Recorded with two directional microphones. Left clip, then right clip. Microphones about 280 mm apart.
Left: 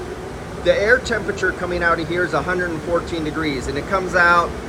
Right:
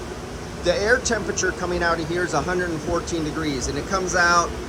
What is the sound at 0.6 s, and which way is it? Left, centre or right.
Speech, centre.